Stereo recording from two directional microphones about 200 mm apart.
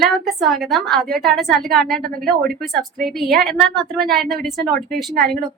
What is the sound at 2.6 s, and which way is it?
A woman's voice, centre (ahead or behind).